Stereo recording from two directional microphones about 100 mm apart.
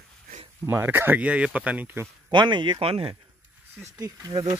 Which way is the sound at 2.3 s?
50° right (ahead or behind).